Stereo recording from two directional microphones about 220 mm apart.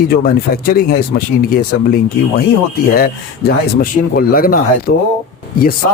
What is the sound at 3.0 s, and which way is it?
Speech, 40° left (ahead or behind).